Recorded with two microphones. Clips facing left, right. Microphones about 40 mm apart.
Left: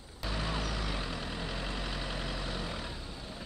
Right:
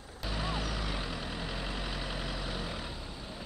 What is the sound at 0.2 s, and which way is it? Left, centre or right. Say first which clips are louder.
Vehicle: even; centre.